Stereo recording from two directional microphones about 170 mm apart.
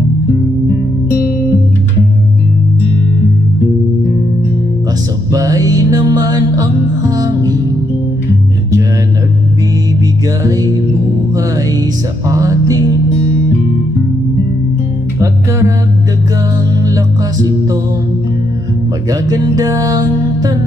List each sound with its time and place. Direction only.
5.3 s music: 20° right (ahead or behind)
10.4 s music: 20° right (ahead or behind)
12.3 s music: 20° right (ahead or behind)
16.8 s music: 20° right (ahead or behind)
19.0 s music: 20° right (ahead or behind)